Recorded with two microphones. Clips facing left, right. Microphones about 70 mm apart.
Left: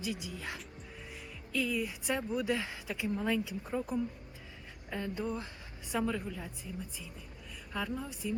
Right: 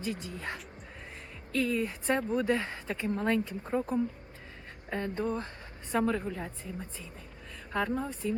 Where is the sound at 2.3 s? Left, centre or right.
Centre.